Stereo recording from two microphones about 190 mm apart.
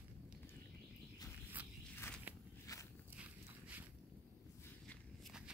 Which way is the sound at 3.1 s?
10° right (ahead or behind).